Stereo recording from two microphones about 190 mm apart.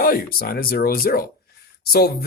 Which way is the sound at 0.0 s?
50° left (ahead or behind).